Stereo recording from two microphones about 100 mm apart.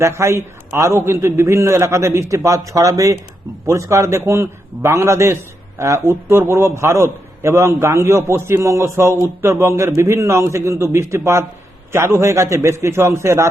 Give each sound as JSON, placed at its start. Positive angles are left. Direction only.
{"t": 0.0, "sound": "a man's voice", "side_deg": -30}